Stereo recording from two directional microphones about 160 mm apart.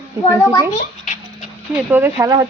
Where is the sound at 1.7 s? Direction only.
10° right (ahead or behind).